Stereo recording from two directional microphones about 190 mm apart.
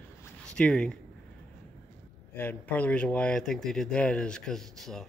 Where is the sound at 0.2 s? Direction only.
5° left (ahead or behind).